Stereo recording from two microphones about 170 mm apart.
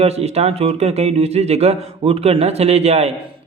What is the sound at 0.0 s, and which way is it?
A man's voice, 40° right (ahead or behind).